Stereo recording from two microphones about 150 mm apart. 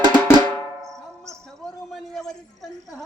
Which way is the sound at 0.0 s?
30° right (ahead or behind).